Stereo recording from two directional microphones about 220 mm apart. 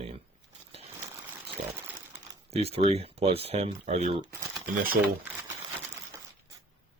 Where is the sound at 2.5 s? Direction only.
25° right (ahead or behind).